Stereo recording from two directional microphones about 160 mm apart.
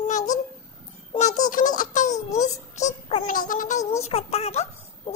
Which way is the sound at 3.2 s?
55° left (ahead or behind).